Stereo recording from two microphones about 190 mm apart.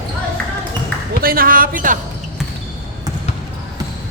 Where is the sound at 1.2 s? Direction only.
50° right (ahead or behind).